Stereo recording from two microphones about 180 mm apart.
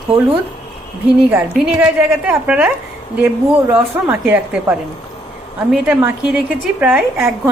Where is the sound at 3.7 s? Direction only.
5° right (ahead or behind).